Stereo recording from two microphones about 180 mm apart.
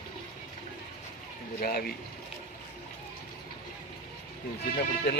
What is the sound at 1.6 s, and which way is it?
Speech, 60° left (ahead or behind).